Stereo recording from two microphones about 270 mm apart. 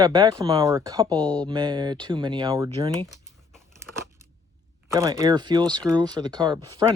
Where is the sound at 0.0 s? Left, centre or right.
Centre.